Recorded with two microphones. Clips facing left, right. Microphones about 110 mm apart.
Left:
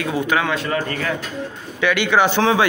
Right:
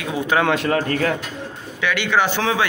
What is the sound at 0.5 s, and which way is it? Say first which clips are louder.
Speech: right 3 dB; 55° right (ahead or behind).